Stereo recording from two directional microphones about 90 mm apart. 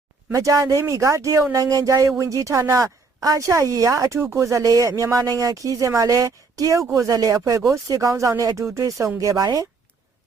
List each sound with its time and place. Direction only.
0.3 s speech: 40° right (ahead or behind)